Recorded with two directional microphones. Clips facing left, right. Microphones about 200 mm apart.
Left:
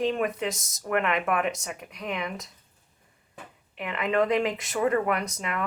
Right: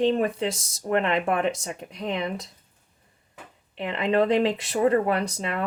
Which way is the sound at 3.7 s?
30° right (ahead or behind).